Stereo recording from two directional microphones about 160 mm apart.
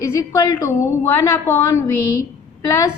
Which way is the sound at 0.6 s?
15° left (ahead or behind).